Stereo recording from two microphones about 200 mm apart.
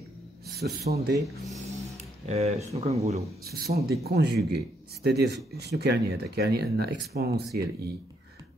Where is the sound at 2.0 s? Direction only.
30° right (ahead or behind).